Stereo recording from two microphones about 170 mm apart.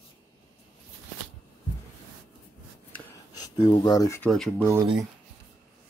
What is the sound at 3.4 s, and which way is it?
Speech, 20° left (ahead or behind).